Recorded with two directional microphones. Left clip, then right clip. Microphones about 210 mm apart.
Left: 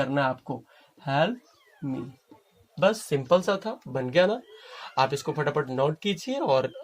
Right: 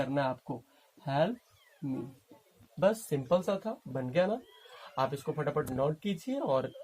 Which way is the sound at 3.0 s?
35° left (ahead or behind).